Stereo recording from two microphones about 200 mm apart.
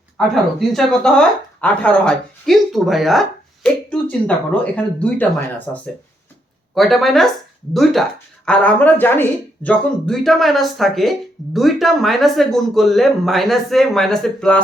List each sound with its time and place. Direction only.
0.7 s speech: centre (ahead or behind)